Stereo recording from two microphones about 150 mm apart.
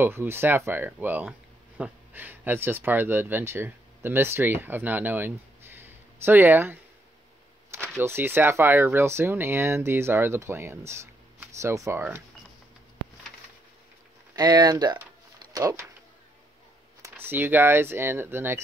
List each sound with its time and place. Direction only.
0.0 s speech: 15° right (ahead or behind)
8.0 s speech: 15° right (ahead or behind)
14.3 s speech: 25° right (ahead or behind)
17.0 s speech: 15° right (ahead or behind)